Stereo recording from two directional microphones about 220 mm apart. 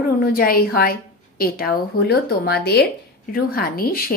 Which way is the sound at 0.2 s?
40° left (ahead or behind).